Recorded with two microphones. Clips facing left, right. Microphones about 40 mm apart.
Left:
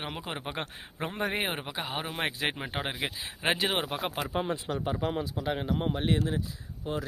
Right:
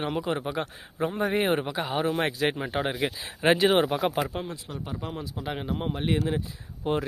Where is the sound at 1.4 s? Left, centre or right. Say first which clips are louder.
Right 7 dB; centre.